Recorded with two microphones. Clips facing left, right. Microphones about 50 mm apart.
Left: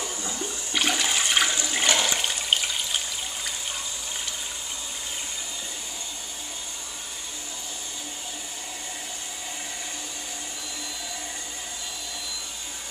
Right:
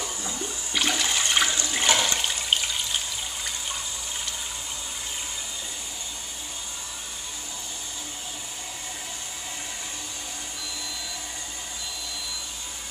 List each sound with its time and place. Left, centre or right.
0.0 s toilet flush: centre